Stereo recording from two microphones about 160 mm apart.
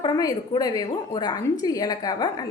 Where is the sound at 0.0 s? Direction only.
25° left (ahead or behind).